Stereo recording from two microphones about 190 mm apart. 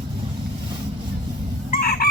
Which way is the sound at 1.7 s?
50° left (ahead or behind).